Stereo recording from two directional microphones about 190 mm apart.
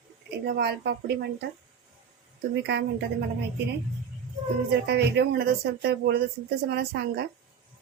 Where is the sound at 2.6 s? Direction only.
60° right (ahead or behind).